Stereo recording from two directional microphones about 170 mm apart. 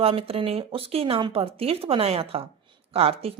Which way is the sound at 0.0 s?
35° right (ahead or behind).